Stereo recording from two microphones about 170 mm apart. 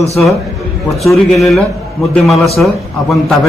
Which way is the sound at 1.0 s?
Centre (ahead or behind).